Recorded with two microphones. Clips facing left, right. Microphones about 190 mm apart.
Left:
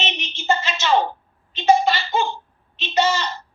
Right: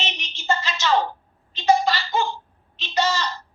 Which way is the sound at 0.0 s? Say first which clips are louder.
Left 4 dB; 20° left (ahead or behind).